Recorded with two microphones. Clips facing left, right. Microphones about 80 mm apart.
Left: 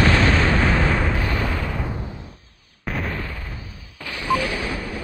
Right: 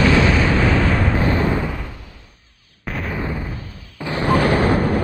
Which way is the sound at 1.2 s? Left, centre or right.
Right.